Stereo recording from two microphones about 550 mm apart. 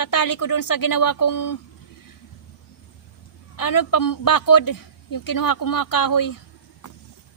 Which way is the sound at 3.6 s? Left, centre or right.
Left.